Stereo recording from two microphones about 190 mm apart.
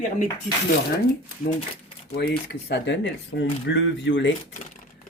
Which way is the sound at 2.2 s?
60° left (ahead or behind).